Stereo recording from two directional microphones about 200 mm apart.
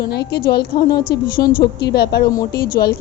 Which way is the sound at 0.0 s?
55° left (ahead or behind).